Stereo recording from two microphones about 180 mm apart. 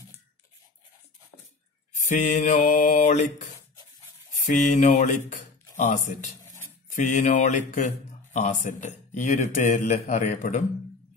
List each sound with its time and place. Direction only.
2.0 s speech: 45° left (ahead or behind)
4.4 s speech: 45° left (ahead or behind)